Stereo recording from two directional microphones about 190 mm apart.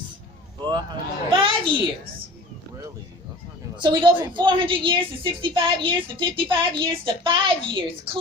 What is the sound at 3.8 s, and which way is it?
A woman's voice, 25° right (ahead or behind).